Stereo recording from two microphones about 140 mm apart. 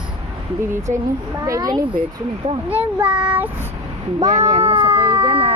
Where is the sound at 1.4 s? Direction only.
25° right (ahead or behind).